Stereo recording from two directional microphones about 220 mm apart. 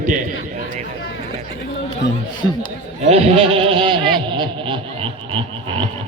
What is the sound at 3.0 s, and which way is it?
Speech, 25° right (ahead or behind).